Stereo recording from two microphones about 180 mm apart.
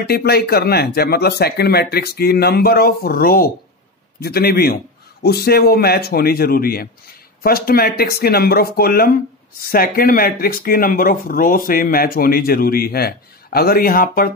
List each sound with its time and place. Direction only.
0.0 s speech: 60° left (ahead or behind)